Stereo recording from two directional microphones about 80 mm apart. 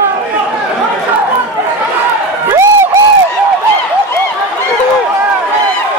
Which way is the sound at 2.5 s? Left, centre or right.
Right.